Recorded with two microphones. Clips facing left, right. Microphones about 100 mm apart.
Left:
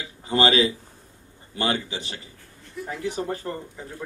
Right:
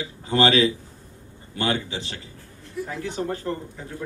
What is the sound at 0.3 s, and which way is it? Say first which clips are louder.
A man's voice: right 1 dB; 20° left (ahead or behind).